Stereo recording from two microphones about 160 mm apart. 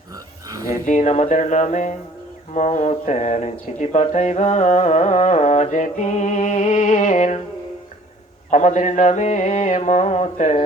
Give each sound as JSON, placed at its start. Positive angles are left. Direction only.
{"t": 0.4, "sound": "a sound", "side_deg": -20}
{"t": 0.7, "sound": "speech", "side_deg": 50}
{"t": 8.4, "sound": "speech", "side_deg": 50}